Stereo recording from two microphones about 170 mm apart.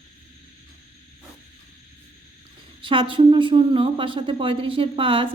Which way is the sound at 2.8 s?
30° right (ahead or behind).